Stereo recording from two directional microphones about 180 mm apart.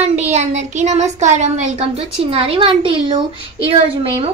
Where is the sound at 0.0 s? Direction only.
40° right (ahead or behind).